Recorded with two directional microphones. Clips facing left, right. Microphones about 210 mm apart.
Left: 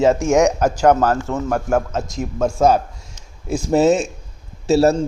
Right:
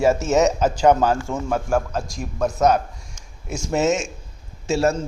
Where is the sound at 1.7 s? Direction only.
20° left (ahead or behind).